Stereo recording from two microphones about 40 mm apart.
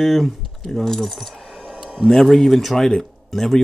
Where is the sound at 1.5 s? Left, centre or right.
Right.